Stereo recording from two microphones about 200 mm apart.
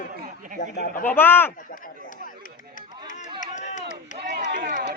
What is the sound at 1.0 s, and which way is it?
Speech, 10° left (ahead or behind).